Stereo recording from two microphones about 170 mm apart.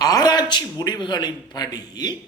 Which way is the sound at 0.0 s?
20° left (ahead or behind).